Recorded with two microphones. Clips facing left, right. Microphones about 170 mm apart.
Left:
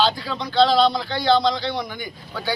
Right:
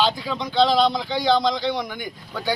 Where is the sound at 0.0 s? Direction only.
15° right (ahead or behind).